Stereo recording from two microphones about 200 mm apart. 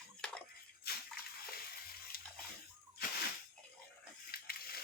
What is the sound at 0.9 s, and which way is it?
Bathtub, 50° left (ahead or behind).